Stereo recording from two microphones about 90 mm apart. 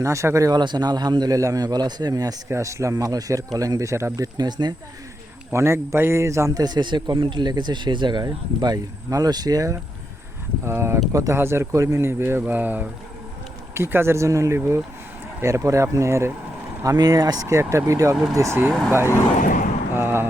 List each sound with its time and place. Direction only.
0.0 s speech: 35° right (ahead or behind)
0.5 s a man's voice: 55° right (ahead or behind)
2.5 s speech: 35° right (ahead or behind)
4.4 s a man's voice: 50° right (ahead or behind)
5.5 s a man's voice: 30° right (ahead or behind)
11.3 s speech: 30° right (ahead or behind)
16.8 s speech: 45° right (ahead or behind); by 18.7 s 30° right (ahead or behind)
19.9 s a sound: 25° right (ahead or behind)